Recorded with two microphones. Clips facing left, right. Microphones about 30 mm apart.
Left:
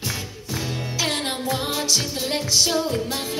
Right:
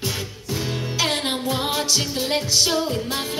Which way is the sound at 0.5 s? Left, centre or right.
Centre.